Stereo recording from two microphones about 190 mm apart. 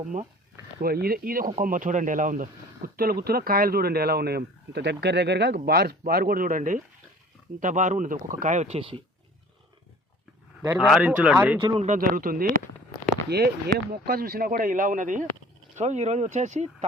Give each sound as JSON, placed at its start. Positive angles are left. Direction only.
{"t": 0.8, "sound": "speech", "side_deg": -50}
{"t": 10.7, "sound": "speech", "side_deg": 0}
{"t": 11.6, "sound": "speech", "side_deg": -25}
{"t": 11.9, "sound": "speech", "side_deg": -50}
{"t": 13.3, "sound": "speech", "side_deg": -60}